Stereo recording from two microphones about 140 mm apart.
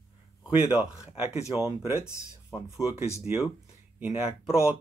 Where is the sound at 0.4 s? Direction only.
10° right (ahead or behind).